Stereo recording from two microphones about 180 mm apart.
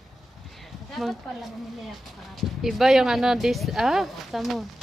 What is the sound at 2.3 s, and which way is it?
Speech, centre (ahead or behind).